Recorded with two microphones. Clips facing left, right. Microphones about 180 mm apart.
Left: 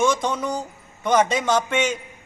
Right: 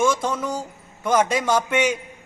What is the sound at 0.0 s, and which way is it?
A man's voice, 5° right (ahead or behind).